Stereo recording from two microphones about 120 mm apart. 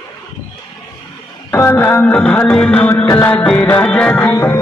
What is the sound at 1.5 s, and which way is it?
Music, 20° left (ahead or behind).